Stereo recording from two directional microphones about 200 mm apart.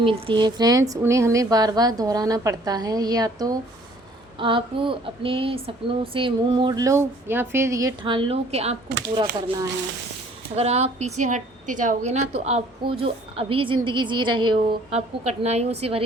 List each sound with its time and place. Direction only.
0.0 s speech: 25° right (ahead or behind)
10.5 s a woman's voice: 30° right (ahead or behind)